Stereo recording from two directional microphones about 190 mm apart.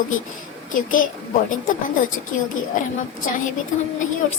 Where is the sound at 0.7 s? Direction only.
45° left (ahead or behind).